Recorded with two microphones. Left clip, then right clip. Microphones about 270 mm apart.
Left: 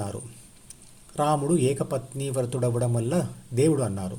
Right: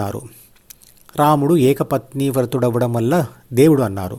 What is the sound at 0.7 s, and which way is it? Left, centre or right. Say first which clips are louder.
Speech: right 9 dB; right.